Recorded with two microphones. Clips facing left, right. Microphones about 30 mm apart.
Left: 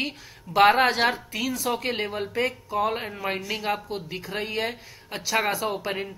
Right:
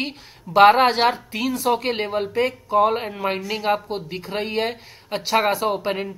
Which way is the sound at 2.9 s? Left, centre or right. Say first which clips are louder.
Right 5 dB; centre.